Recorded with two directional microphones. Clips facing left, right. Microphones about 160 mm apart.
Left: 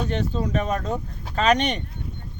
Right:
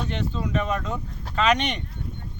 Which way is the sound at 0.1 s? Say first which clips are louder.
Left 3 dB; 40° left (ahead or behind).